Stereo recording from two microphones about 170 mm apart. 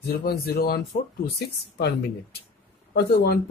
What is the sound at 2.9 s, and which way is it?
Speech, 70° left (ahead or behind).